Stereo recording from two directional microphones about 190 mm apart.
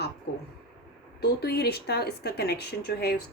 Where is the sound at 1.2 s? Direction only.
60° left (ahead or behind).